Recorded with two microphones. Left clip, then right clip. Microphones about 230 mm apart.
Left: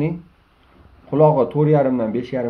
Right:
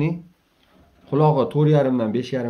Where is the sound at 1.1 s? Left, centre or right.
Right.